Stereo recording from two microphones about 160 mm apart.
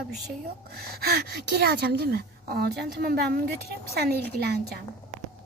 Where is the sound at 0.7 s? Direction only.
75° right (ahead or behind).